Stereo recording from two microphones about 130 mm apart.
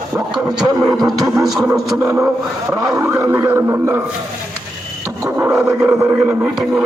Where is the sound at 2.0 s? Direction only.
15° right (ahead or behind).